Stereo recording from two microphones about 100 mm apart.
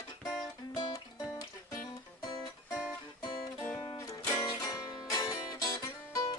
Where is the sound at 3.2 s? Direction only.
60° left (ahead or behind).